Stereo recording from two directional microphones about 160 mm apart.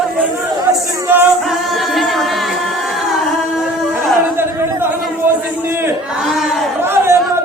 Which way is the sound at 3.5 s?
10° right (ahead or behind).